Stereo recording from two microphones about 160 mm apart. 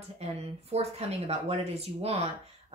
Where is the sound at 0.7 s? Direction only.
40° right (ahead or behind).